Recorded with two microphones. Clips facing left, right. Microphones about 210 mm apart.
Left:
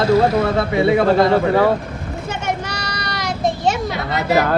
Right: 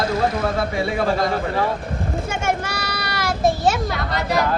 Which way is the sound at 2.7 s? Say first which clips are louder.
Even; 5° right (ahead or behind).